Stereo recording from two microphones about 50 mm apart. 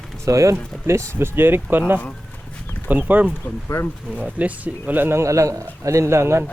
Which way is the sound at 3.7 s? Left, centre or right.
Left.